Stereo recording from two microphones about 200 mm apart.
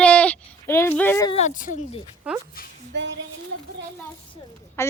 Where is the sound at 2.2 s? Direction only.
5° right (ahead or behind).